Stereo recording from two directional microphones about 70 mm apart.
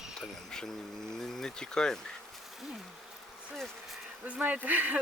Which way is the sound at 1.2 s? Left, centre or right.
Centre.